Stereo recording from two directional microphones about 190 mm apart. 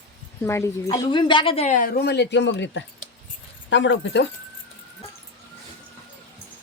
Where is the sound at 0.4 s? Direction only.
15° left (ahead or behind); by 4.3 s 70° left (ahead or behind).